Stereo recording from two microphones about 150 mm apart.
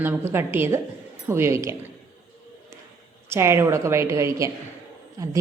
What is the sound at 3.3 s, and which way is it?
A woman's voice, 15° right (ahead or behind).